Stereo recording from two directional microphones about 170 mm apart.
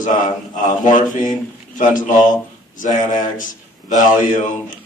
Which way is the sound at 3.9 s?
50° left (ahead or behind).